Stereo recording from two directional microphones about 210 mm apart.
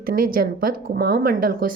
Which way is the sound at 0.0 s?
45° right (ahead or behind).